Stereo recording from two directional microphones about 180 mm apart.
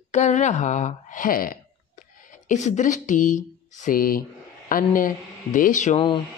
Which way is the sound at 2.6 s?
40° left (ahead or behind).